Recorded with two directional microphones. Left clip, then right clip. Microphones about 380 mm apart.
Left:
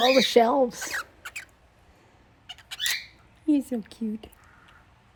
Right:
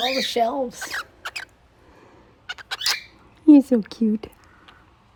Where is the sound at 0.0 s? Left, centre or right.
Centre.